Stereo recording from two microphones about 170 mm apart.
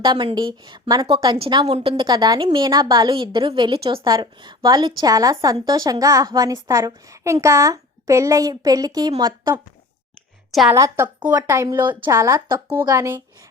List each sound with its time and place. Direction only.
0.0 s a woman's voice: 25° right (ahead or behind)
10.5 s a woman's voice: centre (ahead or behind)
10.8 s a woman's voice: 15° right (ahead or behind)